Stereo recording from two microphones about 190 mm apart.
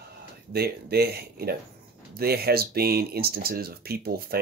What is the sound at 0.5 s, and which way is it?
Speech, 55° right (ahead or behind).